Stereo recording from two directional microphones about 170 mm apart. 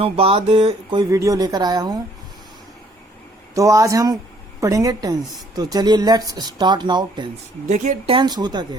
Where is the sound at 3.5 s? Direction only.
20° right (ahead or behind).